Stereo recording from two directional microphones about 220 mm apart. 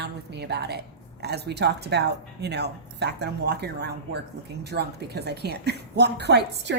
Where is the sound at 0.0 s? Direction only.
50° right (ahead or behind).